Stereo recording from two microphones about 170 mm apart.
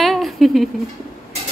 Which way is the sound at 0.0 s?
Centre (ahead or behind).